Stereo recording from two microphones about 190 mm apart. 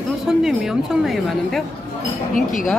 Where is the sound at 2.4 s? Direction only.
45° left (ahead or behind).